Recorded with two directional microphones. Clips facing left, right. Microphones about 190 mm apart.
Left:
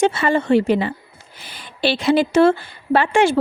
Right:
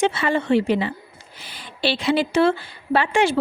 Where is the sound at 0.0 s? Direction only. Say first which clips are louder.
Left 3 dB; 45° left (ahead or behind).